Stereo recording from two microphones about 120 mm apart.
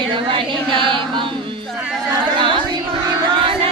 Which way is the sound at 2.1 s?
40° right (ahead or behind).